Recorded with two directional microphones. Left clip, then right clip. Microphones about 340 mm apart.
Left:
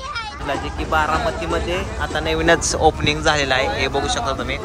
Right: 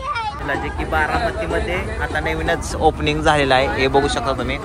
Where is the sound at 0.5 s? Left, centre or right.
Centre.